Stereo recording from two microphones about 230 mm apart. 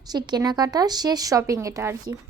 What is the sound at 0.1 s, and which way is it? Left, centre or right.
Speech, centre.